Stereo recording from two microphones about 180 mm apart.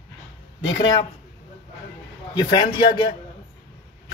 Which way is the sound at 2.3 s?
25° left (ahead or behind).